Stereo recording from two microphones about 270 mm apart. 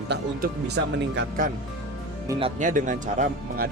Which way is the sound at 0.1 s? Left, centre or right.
Right.